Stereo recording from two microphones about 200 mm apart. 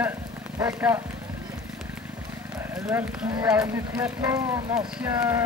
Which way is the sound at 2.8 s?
15° right (ahead or behind).